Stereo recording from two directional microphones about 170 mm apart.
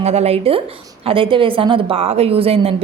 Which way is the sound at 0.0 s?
40° right (ahead or behind).